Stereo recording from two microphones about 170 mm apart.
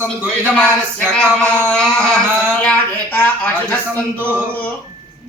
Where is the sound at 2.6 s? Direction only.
10° left (ahead or behind).